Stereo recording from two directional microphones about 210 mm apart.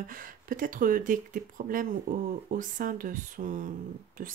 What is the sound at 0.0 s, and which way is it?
A woman's voice, 40° right (ahead or behind).